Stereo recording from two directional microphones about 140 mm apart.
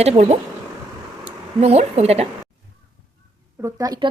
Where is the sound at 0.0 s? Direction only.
50° right (ahead or behind).